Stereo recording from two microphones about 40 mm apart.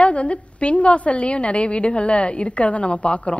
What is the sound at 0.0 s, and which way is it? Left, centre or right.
A woman's voice, left.